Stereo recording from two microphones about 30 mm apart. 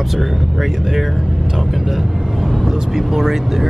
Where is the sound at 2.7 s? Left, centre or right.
Right.